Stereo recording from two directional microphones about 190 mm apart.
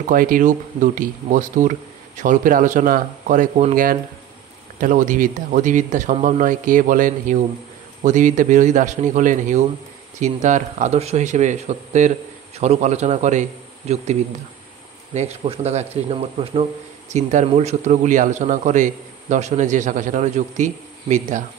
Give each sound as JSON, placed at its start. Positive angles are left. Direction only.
{"t": 0.0, "sound": "a man's voice", "side_deg": -45}
{"t": 15.1, "sound": "a man's voice", "side_deg": -30}